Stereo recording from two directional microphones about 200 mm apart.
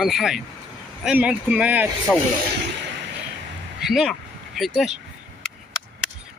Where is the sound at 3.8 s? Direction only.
Centre (ahead or behind).